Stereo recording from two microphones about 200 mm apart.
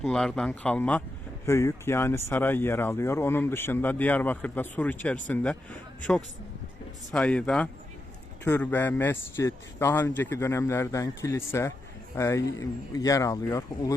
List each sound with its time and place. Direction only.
0.0 s speech: 5° left (ahead or behind)
7.1 s speech: 5° left (ahead or behind)